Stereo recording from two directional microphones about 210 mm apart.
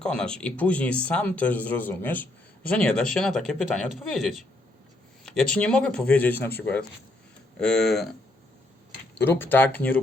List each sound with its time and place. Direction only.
0.0 s speech: 5° left (ahead or behind)
9.1 s speech: 10° left (ahead or behind)